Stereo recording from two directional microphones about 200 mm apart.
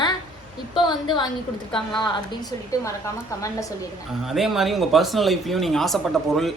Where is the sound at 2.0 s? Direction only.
20° left (ahead or behind).